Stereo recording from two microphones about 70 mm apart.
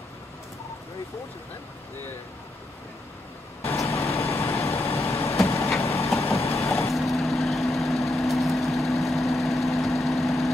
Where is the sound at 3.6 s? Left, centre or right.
Left.